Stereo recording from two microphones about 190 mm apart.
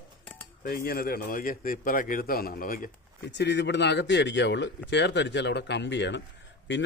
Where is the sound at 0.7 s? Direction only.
50° left (ahead or behind).